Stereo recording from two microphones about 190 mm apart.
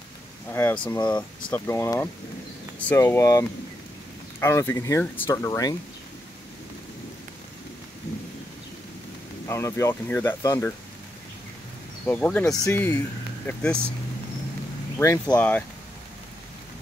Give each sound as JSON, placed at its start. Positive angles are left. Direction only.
{"t": 0.5, "sound": "speech", "side_deg": 10}
{"t": 9.5, "sound": "speech", "side_deg": 15}
{"t": 12.1, "sound": "speech", "side_deg": 10}
{"t": 15.0, "sound": "speech", "side_deg": 10}